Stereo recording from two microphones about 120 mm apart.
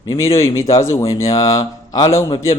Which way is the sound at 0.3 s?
25° left (ahead or behind).